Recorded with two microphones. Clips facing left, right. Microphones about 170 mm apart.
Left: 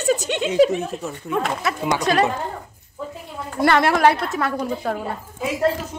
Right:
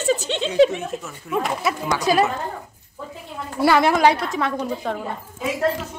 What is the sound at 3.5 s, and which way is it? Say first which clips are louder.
A woman's voice: even; 5° right (ahead or behind).